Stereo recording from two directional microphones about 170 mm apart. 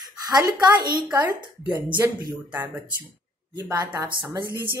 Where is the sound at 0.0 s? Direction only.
25° right (ahead or behind).